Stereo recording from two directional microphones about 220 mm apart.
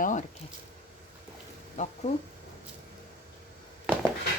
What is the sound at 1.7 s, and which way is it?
Speech, 30° left (ahead or behind).